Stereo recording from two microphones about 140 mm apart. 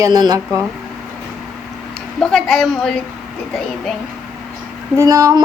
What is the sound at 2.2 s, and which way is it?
Speech, centre (ahead or behind).